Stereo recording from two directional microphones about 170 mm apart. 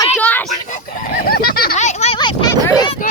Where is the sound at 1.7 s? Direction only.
45° left (ahead or behind).